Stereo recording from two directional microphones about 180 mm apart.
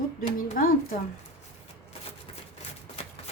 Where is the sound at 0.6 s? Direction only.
50° left (ahead or behind).